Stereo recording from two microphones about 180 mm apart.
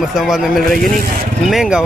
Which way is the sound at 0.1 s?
Centre (ahead or behind).